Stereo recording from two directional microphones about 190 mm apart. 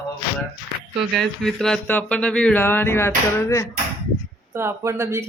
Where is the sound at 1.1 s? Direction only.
Centre (ahead or behind).